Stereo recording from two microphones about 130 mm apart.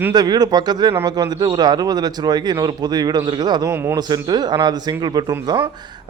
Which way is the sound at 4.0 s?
30° right (ahead or behind).